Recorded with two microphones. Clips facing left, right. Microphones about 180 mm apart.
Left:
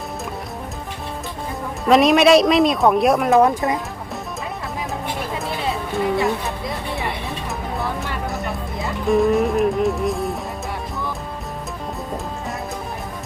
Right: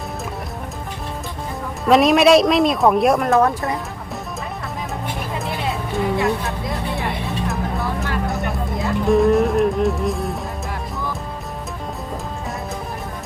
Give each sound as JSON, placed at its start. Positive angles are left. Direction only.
{"t": 1.9, "sound": "speech", "side_deg": 0}
{"t": 3.3, "sound": "speech", "side_deg": 15}
{"t": 5.9, "sound": "speech", "side_deg": 0}
{"t": 6.9, "sound": "music", "side_deg": 0}